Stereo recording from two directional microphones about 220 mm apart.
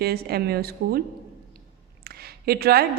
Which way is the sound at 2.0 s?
45° right (ahead or behind).